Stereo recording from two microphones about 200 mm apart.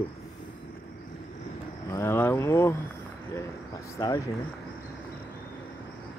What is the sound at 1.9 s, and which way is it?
Speech, 15° left (ahead or behind).